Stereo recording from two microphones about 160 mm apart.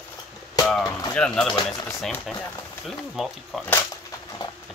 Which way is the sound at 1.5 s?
20° left (ahead or behind).